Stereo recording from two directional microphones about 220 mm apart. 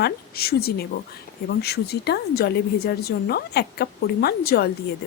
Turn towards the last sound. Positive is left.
turn(degrees=45)  # may be behind; listen again after turning